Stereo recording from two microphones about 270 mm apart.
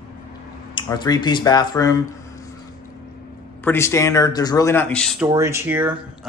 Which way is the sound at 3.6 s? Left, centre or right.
Centre.